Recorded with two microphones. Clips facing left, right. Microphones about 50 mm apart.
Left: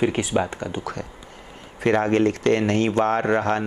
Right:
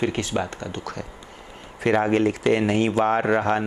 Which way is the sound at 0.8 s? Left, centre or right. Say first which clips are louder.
Left 2 dB; centre.